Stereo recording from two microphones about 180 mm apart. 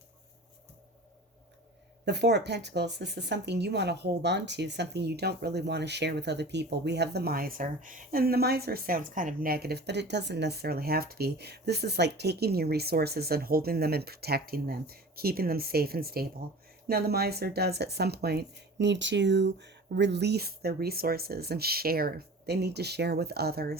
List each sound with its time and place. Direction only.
2.0 s speech: 70° right (ahead or behind)